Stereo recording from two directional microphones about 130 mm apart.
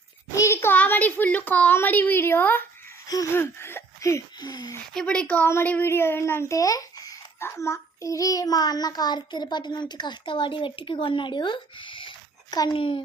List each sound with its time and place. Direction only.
0.3 s a child's voice: 20° left (ahead or behind)
4.9 s a child's voice: 10° left (ahead or behind); by 12.7 s 30° left (ahead or behind)
12.7 s a woman's voice: 45° left (ahead or behind)